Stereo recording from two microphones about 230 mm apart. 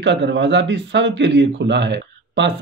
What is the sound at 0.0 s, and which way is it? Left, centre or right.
A man's voice, right.